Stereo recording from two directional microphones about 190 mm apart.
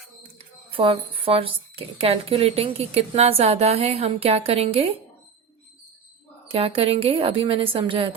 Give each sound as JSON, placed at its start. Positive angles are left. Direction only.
{"t": 0.3, "sound": "a woman's voice", "side_deg": -30}
{"t": 6.5, "sound": "a woman's voice", "side_deg": -30}